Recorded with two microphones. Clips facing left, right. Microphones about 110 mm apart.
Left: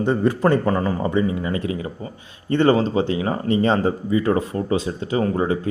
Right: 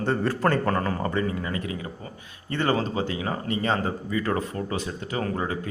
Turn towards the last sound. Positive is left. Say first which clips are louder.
# left 8 dB
turn(degrees=25)  # may be behind; listen again after turning